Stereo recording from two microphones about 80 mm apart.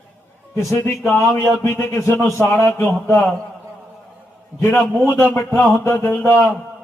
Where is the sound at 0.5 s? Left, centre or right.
Left.